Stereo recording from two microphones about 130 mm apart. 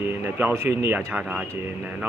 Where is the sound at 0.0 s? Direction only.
15° right (ahead or behind).